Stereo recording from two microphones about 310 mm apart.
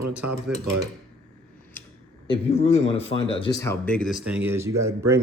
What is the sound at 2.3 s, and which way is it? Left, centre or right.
Speech, centre.